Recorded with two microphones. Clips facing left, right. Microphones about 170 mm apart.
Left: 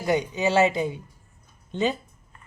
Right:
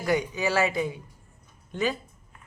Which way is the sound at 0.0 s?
20° left (ahead or behind).